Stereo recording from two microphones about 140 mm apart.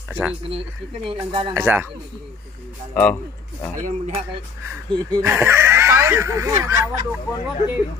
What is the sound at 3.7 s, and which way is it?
Speech, 65° right (ahead or behind).